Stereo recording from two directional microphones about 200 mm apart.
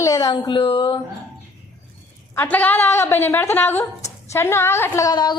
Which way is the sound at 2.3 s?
10° left (ahead or behind).